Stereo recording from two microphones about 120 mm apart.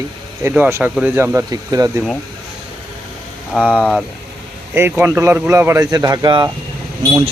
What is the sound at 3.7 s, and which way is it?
Speech, 5° left (ahead or behind).